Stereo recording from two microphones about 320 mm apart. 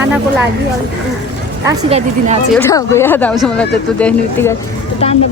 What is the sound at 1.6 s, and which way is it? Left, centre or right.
Speech, centre.